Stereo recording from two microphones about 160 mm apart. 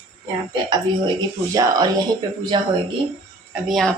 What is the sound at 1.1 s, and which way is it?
Speech, 25° right (ahead or behind).